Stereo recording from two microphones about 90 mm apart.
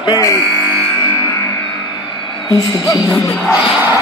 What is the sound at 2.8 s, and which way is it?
Music, 40° left (ahead or behind).